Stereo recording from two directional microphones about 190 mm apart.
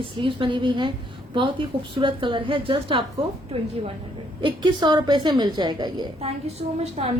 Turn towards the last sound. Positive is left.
turn(degrees=-30)  # may be behind; listen again after turning